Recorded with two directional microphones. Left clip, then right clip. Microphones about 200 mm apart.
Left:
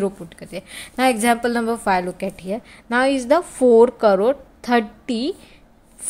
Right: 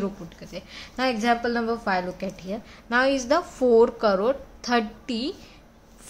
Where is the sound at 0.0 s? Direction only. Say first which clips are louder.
Left 7 dB; 35° left (ahead or behind).